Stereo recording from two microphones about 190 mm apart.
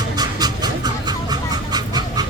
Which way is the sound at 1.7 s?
20° right (ahead or behind).